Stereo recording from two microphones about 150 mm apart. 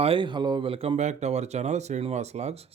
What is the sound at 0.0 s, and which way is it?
Speech, 35° right (ahead or behind).